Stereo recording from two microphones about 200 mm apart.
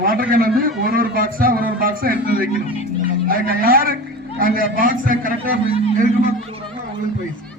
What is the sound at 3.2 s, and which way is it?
A man's voice, 45° right (ahead or behind).